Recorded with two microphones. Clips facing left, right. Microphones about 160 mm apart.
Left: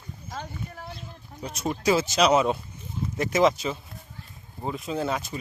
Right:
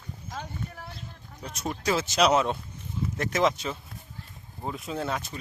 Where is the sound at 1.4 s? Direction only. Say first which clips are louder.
Left 4 dB; centre (ahead or behind).